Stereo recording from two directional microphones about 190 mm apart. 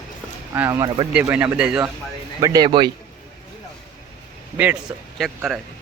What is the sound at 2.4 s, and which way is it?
Speech, 20° right (ahead or behind).